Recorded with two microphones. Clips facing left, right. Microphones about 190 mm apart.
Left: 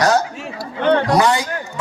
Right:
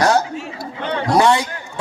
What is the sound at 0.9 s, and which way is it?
Speech, 55° left (ahead or behind).